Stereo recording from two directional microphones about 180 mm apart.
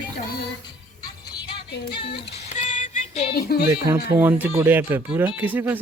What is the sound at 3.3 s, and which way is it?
Speech, 60° left (ahead or behind).